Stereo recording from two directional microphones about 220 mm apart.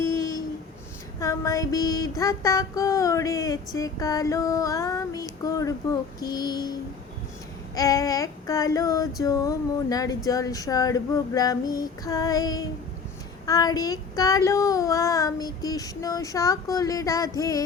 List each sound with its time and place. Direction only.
0.0 s a sound: 15° left (ahead or behind)
1.2 s child singing: 15° left (ahead or behind)
7.8 s child singing: 15° left (ahead or behind)